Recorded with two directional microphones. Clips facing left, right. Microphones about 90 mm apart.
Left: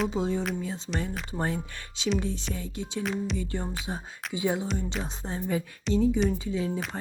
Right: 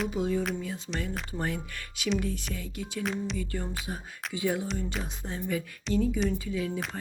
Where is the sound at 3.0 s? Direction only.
Centre (ahead or behind).